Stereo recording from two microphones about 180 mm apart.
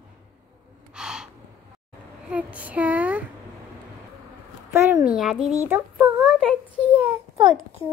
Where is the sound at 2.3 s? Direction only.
10° right (ahead or behind).